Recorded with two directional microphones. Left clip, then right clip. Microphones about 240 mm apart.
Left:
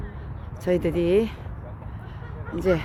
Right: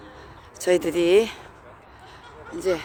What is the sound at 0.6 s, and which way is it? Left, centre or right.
Speech, centre.